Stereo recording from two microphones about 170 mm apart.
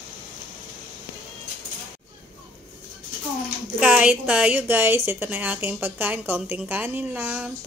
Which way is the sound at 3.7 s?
10° right (ahead or behind).